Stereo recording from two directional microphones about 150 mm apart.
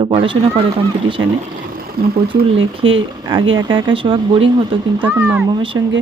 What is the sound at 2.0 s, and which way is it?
Speech, 80° right.